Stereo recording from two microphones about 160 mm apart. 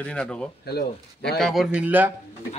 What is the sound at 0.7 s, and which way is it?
Speech, 80° left.